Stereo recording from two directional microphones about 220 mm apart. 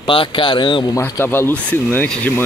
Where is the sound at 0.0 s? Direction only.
25° left (ahead or behind).